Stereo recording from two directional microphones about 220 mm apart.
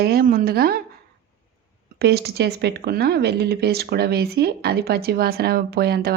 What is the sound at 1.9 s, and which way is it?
Speech, 45° right (ahead or behind).